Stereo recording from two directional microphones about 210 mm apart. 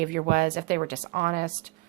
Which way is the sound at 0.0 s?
45° right (ahead or behind).